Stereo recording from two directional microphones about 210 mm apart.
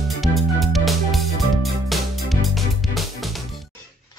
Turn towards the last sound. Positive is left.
turn(degrees=0)  # may be behind; listen again after turning